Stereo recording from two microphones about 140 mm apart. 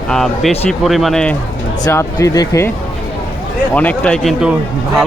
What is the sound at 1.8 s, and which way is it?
Speech, 20° left (ahead or behind).